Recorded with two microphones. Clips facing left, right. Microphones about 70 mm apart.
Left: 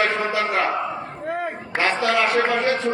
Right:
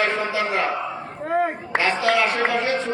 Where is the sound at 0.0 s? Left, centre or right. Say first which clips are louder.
Left 1 dB; centre.